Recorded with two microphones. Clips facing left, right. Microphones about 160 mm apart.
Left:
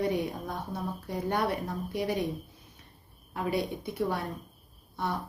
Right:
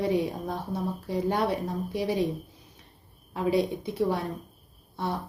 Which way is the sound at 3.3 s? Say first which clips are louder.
Right 5 dB; 30° right (ahead or behind).